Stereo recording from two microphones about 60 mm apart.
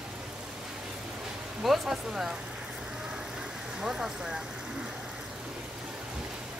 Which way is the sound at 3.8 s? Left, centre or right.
Centre.